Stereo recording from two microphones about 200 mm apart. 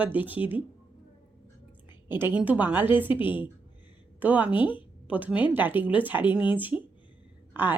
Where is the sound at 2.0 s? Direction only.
10° right (ahead or behind).